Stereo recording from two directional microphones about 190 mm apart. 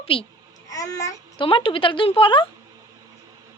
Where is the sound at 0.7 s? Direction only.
20° left (ahead or behind).